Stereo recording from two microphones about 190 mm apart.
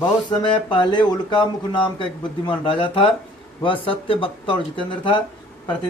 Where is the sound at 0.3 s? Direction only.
25° left (ahead or behind).